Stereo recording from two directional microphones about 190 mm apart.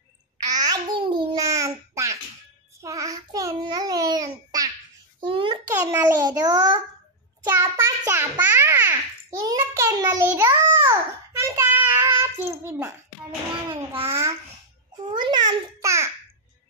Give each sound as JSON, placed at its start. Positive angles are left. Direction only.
{"t": 0.5, "sound": "babbling", "side_deg": -20}
{"t": 5.7, "sound": "a sound", "side_deg": -20}
{"t": 14.0, "sound": "babbling", "side_deg": -15}